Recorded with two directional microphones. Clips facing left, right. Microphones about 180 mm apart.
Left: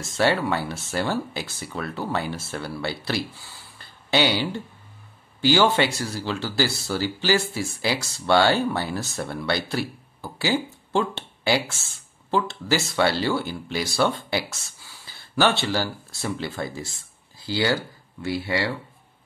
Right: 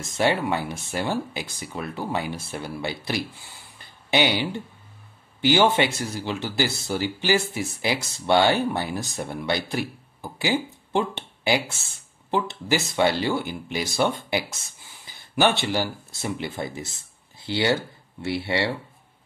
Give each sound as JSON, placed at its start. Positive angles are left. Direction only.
{"t": 0.0, "sound": "speech", "side_deg": -15}